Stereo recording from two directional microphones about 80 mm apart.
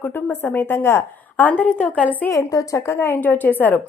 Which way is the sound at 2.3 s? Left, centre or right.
Left.